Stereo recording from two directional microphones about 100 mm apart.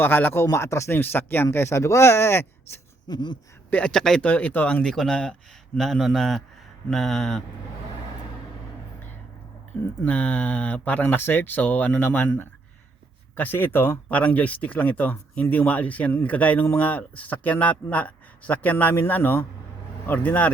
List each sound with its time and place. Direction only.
0.0 s speech: 20° left (ahead or behind)
3.1 s a sound: 50° left (ahead or behind)
3.7 s speech: 10° left (ahead or behind)
4.3 s speech: 15° left (ahead or behind)
10.0 s speech: 15° left (ahead or behind)
13.3 s speech: 20° left (ahead or behind)